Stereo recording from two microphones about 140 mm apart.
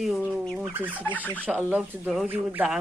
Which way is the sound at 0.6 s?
10° right (ahead or behind).